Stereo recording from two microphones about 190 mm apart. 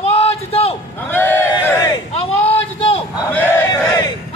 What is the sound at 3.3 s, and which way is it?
Battle cry, 15° left (ahead or behind).